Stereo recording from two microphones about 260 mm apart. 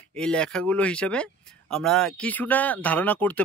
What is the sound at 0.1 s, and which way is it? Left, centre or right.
Speech, centre.